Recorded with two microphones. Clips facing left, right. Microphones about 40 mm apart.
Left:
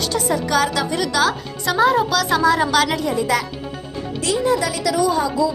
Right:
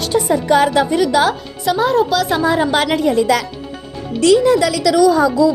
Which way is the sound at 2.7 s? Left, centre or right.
Right.